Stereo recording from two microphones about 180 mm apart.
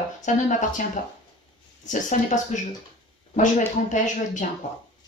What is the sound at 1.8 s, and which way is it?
Speech, 45° left (ahead or behind).